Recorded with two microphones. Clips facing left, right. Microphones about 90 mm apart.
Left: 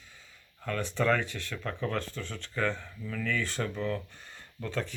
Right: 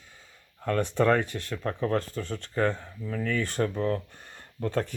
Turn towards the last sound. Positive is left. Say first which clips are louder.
# right 6 dB
turn(degrees=-45)  # may be behind; listen again after turning